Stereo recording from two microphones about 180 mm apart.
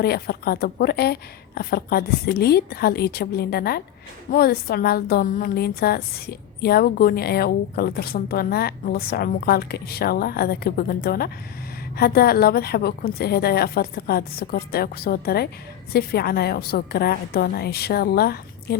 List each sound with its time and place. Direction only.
0.0 s a woman's voice: 60° left (ahead or behind)